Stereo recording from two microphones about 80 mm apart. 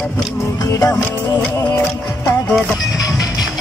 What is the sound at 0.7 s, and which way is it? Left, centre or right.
Music, left.